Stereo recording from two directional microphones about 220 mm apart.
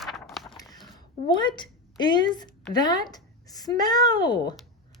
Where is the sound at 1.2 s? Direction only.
20° left (ahead or behind).